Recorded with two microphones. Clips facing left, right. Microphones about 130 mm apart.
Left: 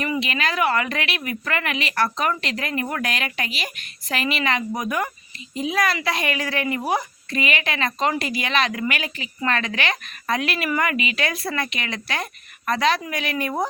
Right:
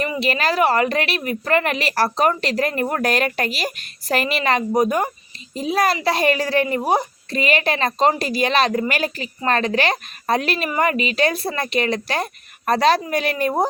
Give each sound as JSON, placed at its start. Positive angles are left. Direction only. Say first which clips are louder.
{"t": 0.0, "sound": "a woman's voice", "louder": "right 3 dB", "side_deg": -35}